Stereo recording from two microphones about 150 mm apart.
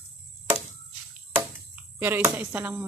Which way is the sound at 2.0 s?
15° right (ahead or behind).